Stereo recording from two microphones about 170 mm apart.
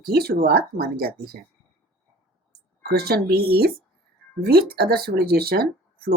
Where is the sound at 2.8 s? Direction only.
65° right (ahead or behind).